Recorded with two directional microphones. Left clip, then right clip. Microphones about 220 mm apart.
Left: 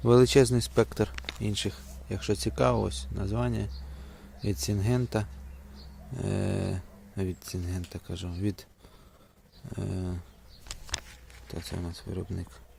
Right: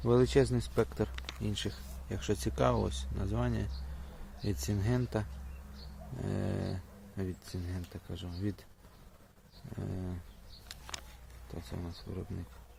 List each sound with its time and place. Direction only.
0.0 s speech: 35° left (ahead or behind)
9.7 s speech: 35° left (ahead or behind)
11.5 s speech: 35° left (ahead or behind)